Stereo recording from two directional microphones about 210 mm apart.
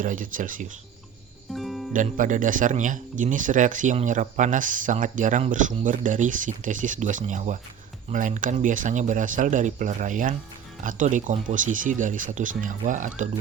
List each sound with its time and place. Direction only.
0.0 s speech: 40° right (ahead or behind)
1.5 s music: centre (ahead or behind)
1.9 s speech: 40° right (ahead or behind)